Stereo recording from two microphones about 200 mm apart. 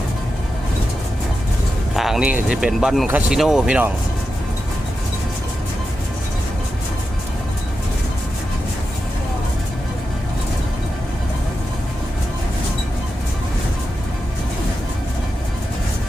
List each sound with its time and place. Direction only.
2.0 s speech: centre (ahead or behind)